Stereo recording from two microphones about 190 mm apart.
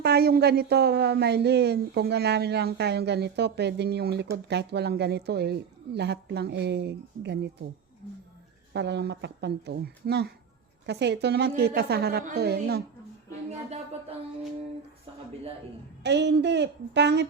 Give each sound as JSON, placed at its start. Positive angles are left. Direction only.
{"t": 0.0, "sound": "speech", "side_deg": -55}
{"t": 8.7, "sound": "speech", "side_deg": -60}
{"t": 16.0, "sound": "speech", "side_deg": -65}